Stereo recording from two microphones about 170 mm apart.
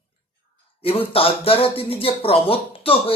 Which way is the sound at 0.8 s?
35° left (ahead or behind).